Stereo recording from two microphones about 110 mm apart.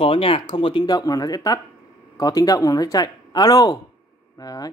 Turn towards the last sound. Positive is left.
turn(degrees=35)  # may be behind; listen again after turning